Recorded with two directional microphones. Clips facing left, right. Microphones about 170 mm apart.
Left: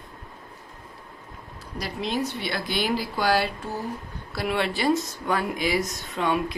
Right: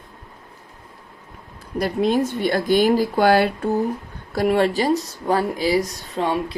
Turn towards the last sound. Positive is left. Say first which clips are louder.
# right 3 dB
turn(degrees=-30)  # may be behind; listen again after turning